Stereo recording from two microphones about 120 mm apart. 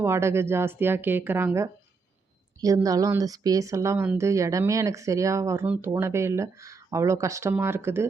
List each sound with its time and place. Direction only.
0.0 s speech: 20° right (ahead or behind)